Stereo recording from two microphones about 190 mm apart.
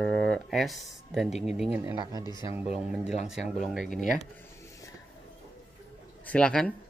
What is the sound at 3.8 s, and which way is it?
Speech, 40° left (ahead or behind).